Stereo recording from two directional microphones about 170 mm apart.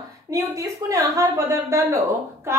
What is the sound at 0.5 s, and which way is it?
A woman's voice, 20° right (ahead or behind).